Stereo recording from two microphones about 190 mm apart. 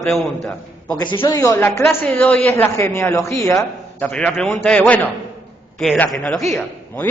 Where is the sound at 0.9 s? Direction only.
25° left (ahead or behind).